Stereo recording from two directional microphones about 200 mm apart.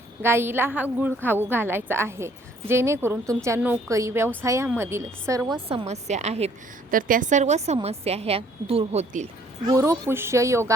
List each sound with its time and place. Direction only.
0.2 s a woman's voice: 10° right (ahead or behind)
5.5 s a woman's voice: 30° right (ahead or behind)
9.6 s a woman's voice: 15° right (ahead or behind)